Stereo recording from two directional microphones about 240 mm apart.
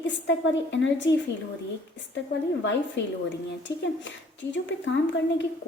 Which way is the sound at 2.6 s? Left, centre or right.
Left.